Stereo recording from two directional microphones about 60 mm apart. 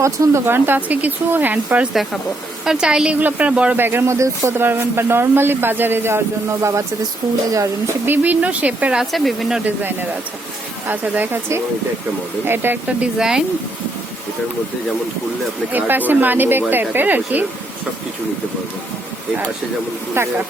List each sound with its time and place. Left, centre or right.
0.0 s a man's voice: right
2.6 s a woman's voice: centre
3.2 s speech: right
3.8 s a man's voice: right
4.0 s speech: right
4.5 s a man's voice: right
8.0 s speech: right
9.0 s speech: centre
9.6 s a man's voice: right
11.3 s a man's voice: right
13.0 s a woman's voice: centre
15.7 s a man's voice: right
20.2 s speech: right